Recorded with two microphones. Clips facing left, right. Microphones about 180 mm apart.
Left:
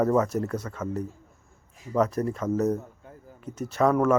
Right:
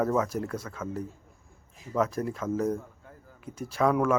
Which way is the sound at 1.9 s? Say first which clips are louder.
Left 3 dB; 5° right (ahead or behind).